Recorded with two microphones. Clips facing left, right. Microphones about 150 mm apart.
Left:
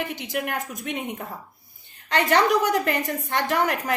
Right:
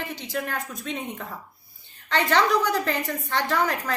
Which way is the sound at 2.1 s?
15° left (ahead or behind).